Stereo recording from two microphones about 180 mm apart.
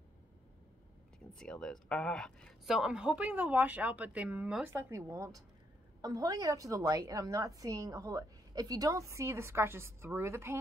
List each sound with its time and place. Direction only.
1.3 s a woman's voice: 5° left (ahead or behind); by 10.6 s 15° right (ahead or behind)